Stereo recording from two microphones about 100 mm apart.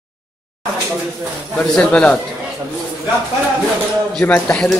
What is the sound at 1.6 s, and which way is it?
Speech, 10° left (ahead or behind).